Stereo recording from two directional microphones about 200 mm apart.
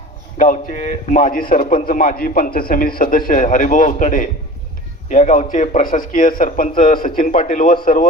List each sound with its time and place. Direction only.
0.3 s a man's voice: 40° left (ahead or behind)